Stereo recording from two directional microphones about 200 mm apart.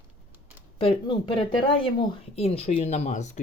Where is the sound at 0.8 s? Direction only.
25° left (ahead or behind).